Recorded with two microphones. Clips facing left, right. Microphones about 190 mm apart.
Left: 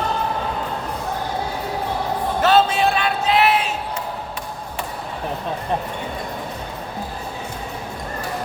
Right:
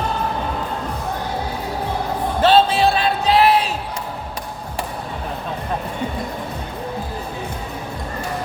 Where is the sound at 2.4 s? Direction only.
30° right (ahead or behind).